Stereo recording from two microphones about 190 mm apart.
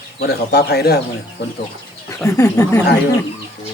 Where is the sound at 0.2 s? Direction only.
55° left (ahead or behind).